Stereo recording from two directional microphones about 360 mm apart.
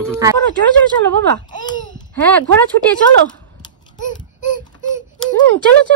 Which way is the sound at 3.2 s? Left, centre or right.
Left.